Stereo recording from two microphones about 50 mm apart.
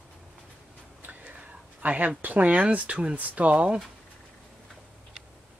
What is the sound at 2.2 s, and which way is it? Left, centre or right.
Speech, right.